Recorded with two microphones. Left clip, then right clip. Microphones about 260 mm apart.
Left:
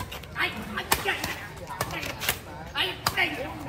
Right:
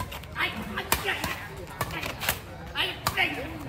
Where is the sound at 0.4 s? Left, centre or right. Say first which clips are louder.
Left 1 dB; centre.